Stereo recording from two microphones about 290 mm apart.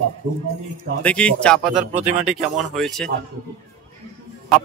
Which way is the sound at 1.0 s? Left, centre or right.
Centre.